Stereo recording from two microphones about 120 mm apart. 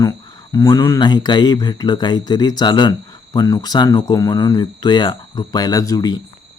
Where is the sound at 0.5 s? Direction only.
30° left (ahead or behind).